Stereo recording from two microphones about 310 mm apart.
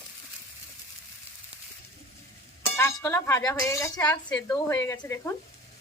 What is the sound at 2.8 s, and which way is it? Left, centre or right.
Speech, centre.